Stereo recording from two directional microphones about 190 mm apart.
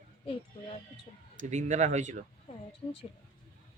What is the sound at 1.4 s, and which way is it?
Speech, 40° right (ahead or behind).